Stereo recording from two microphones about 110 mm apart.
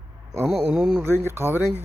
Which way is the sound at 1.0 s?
20° right (ahead or behind).